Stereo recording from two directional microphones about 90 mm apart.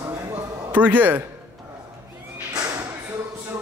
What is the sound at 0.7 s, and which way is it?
Speech, 20° right (ahead or behind).